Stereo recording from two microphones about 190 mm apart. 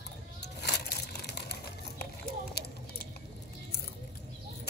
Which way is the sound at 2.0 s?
55° left (ahead or behind).